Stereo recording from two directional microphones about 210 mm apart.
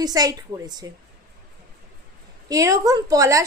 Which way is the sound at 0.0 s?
15° right (ahead or behind).